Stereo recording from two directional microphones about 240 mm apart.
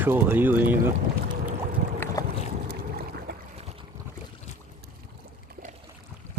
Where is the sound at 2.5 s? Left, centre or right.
Right.